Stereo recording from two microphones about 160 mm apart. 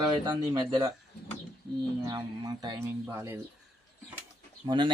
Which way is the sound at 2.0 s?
25° right (ahead or behind).